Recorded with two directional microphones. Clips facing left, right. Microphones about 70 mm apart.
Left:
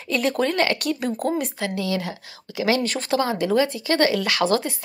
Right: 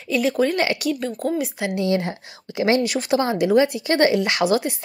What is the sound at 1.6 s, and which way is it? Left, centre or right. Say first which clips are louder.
Speech: right 4 dB; right.